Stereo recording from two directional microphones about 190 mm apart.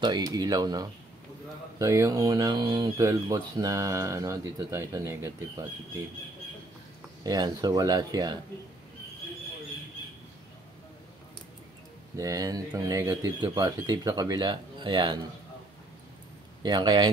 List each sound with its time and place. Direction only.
0.0 s speech: 20° right (ahead or behind)
7.2 s speech: 20° right (ahead or behind)
12.2 s speech: 20° right (ahead or behind)
16.6 s speech: 25° right (ahead or behind)